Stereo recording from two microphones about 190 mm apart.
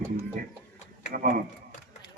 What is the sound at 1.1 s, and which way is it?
Speech, 50° right (ahead or behind).